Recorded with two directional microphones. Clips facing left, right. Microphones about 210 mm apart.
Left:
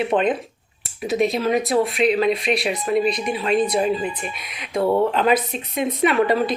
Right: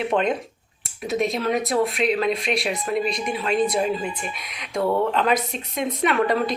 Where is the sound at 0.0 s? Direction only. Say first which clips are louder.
Left 2 dB; centre (ahead or behind).